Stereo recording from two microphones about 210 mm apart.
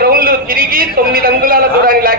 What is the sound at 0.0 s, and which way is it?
A man's voice, 45° right (ahead or behind).